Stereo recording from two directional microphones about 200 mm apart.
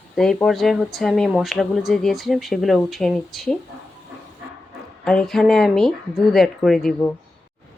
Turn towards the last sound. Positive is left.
turn(degrees=0)  # may be behind; listen again after turning